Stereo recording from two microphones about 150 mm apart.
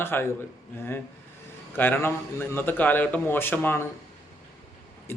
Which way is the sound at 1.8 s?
15° left (ahead or behind).